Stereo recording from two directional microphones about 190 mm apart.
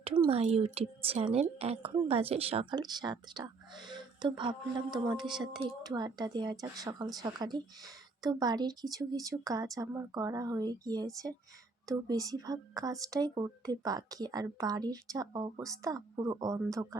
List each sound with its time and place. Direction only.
0.3 s speech: 30° right (ahead or behind)